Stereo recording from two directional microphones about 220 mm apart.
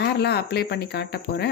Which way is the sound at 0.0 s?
50° left (ahead or behind).